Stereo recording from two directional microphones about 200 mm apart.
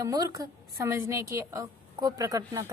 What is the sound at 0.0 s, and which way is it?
A woman's voice, 15° right (ahead or behind).